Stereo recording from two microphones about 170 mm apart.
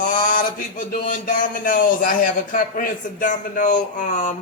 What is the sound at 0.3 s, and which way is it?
A man's voice, 55° left (ahead or behind).